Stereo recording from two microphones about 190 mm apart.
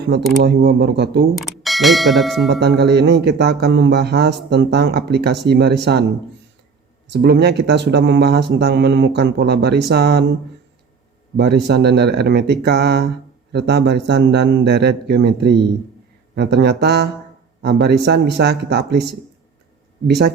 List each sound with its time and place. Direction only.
0.4 s speech: 60° right (ahead or behind)
1.4 s speech: centre (ahead or behind)
2.5 s speech: 60° right (ahead or behind)
7.1 s speech: 60° right (ahead or behind)
11.3 s speech: 60° right (ahead or behind)
20.1 s speech: 60° right (ahead or behind)